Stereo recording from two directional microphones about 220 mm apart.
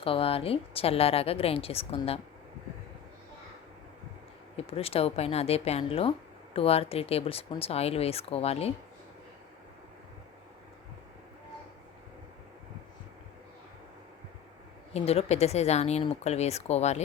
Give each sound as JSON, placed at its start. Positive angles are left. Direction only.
{"t": 0.0, "sound": "speech", "side_deg": 25}
{"t": 4.5, "sound": "speech", "side_deg": 25}
{"t": 14.9, "sound": "speech", "side_deg": 30}